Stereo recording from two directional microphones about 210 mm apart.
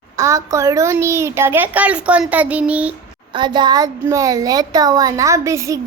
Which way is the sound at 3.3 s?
20° right (ahead or behind).